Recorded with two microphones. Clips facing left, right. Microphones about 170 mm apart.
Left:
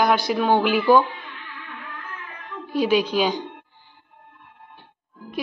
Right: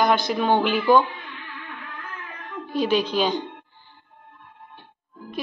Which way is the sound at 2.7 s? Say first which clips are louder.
Left 2 dB; 10° left (ahead or behind).